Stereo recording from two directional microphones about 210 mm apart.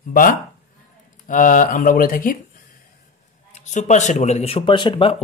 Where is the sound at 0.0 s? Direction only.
40° left (ahead or behind).